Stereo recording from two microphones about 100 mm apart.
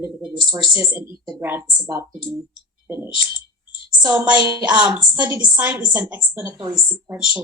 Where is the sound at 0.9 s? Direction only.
25° right (ahead or behind).